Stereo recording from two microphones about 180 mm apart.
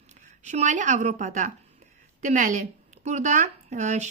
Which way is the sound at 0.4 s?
40° right (ahead or behind).